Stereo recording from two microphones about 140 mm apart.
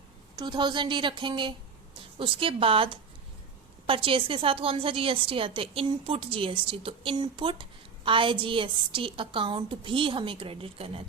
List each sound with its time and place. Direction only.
0.3 s a woman's voice: 30° right (ahead or behind)